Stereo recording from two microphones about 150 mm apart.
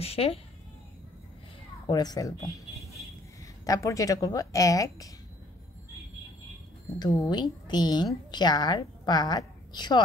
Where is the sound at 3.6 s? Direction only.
20° left (ahead or behind).